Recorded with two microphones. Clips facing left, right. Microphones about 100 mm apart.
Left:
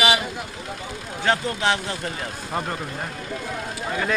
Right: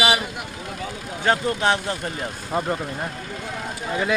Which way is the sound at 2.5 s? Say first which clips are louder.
Right 4 dB; 5° right (ahead or behind).